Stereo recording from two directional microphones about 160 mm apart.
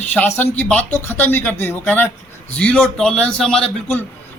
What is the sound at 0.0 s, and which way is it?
A man's voice, 10° left (ahead or behind).